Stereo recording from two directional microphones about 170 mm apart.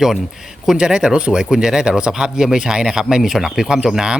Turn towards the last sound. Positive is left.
turn(degrees=-5)  # may be behind; listen again after turning